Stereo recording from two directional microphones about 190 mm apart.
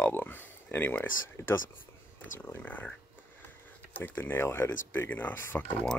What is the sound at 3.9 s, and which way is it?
Speech, 10° left (ahead or behind).